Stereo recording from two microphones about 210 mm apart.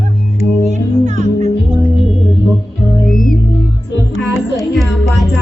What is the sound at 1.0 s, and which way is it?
Music, 35° right (ahead or behind).